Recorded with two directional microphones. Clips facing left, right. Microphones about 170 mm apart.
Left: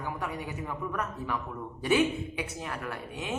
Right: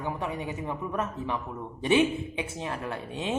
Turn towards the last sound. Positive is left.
turn(degrees=-25)  # may be behind; listen again after turning